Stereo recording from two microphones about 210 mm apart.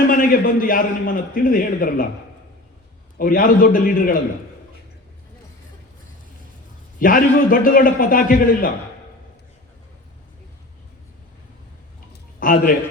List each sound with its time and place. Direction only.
0.1 s a man's voice: 40° left (ahead or behind)
3.2 s a man's voice: 40° left (ahead or behind)
7.0 s a man's voice: 45° left (ahead or behind)
12.4 s a man's voice: 40° left (ahead or behind)